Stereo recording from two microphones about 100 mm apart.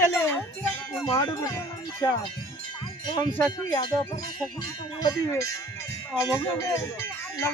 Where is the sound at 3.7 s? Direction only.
45° left (ahead or behind).